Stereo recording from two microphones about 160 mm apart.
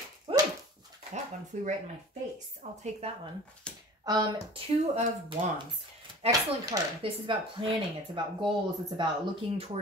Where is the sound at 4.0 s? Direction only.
25° right (ahead or behind).